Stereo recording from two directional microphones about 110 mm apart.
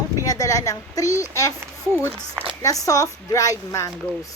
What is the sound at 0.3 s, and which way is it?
A woman's voice, 30° left (ahead or behind).